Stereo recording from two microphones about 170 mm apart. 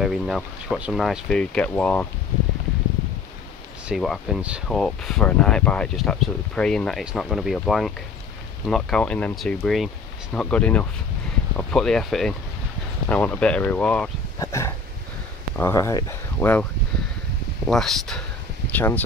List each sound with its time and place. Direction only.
0.0 s speech: centre (ahead or behind)
3.9 s speech: centre (ahead or behind)
17.6 s speech: centre (ahead or behind)